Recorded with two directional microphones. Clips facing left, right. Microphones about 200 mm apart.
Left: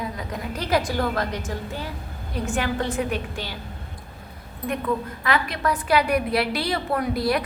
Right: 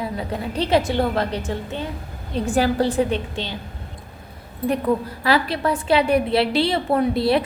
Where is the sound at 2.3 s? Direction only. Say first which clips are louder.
Right 6 dB; 35° right (ahead or behind).